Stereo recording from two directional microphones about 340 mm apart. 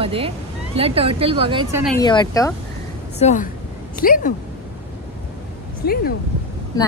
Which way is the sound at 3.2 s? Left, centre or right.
Left.